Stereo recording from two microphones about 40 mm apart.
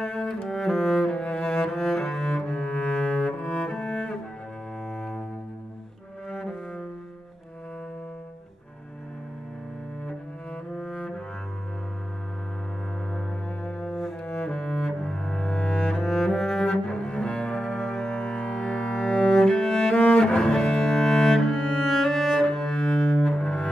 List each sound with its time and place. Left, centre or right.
0.0 s bowed string instrument: centre
0.5 s cello: centre
2.3 s cello: left
10.7 s cello: centre
13.7 s cello: centre
16.0 s cello: centre
16.8 s cello: left
19.2 s music: centre
20.0 s cello: left
20.4 s cello: centre